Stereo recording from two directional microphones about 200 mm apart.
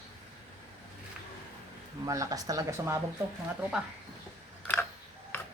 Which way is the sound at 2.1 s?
15° right (ahead or behind).